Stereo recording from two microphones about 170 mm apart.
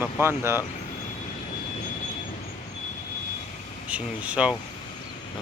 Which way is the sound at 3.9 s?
5° right (ahead or behind).